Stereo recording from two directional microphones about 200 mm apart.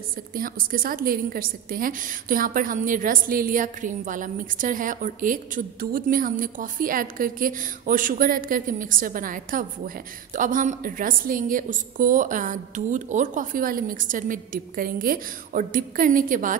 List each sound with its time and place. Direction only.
0.3 s a woman's voice: 45° right (ahead or behind)